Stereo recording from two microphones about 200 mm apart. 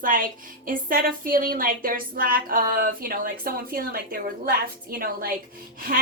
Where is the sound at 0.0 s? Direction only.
45° right (ahead or behind).